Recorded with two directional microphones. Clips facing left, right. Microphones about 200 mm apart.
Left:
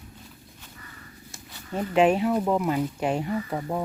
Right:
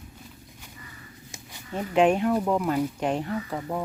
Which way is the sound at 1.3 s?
15° right (ahead or behind).